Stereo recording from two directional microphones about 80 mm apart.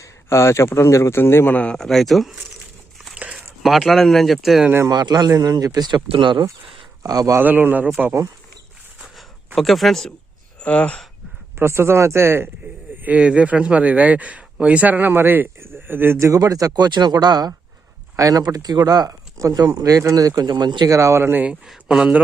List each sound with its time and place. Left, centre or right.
0.0 s speech: left
1.5 s speech: centre
3.2 s a sound: centre
3.6 s speech: centre
4.9 s speech: right
7.0 s speech: right
7.3 s a man's voice: right
9.6 s speech: centre
10.6 s speech: centre
11.6 s speech: right
13.0 s a man's voice: centre; by 17.5 s right
18.2 s speech: right
20.9 s speech: right
21.8 s speech: centre